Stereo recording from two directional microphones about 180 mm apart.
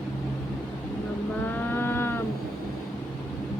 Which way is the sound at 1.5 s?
10° left (ahead or behind).